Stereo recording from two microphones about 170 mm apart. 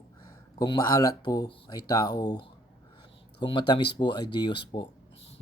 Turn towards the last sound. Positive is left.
turn(degrees=30)  # may be behind; listen again after turning